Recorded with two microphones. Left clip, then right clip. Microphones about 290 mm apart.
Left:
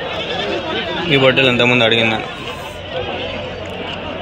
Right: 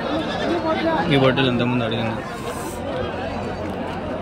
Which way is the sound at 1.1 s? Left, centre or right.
Centre.